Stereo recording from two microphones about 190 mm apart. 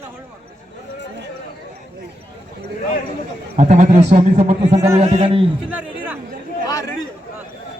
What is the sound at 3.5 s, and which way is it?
A man's voice, 40° right (ahead or behind).